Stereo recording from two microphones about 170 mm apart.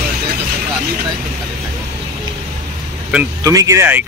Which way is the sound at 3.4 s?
20° right (ahead or behind).